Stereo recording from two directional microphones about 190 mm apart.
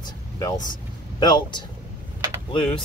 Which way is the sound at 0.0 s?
20° left (ahead or behind).